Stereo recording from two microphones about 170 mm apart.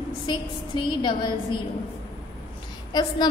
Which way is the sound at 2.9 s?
25° left (ahead or behind).